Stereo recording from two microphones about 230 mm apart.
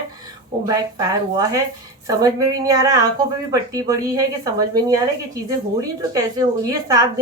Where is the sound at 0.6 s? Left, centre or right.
Centre.